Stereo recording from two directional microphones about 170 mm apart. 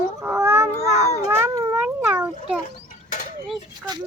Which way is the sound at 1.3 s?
15° right (ahead or behind).